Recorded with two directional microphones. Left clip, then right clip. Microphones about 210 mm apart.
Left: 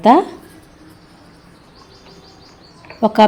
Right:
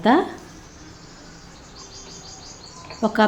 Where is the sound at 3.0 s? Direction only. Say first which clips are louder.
Left 8 dB; 25° left (ahead or behind).